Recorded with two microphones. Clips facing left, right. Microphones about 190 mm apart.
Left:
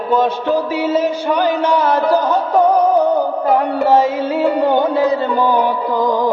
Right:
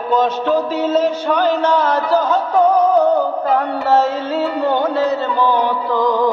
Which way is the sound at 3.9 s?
15° left (ahead or behind).